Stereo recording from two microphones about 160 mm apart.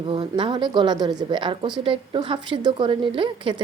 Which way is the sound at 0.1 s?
30° right (ahead or behind).